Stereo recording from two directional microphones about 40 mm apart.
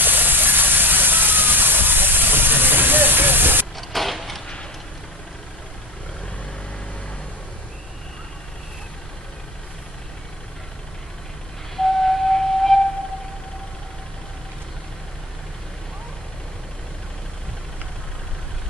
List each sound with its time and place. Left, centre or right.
0.0 s steam: right
3.7 s vehicle: centre
11.7 s flute: centre